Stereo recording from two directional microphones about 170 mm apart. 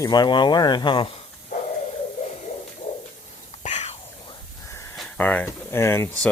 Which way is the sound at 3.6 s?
40° left (ahead or behind).